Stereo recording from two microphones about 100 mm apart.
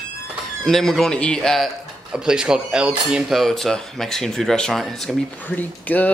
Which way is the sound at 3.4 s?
5° left (ahead or behind).